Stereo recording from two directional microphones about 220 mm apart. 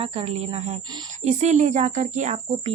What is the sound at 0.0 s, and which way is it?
Speech, 25° right (ahead or behind).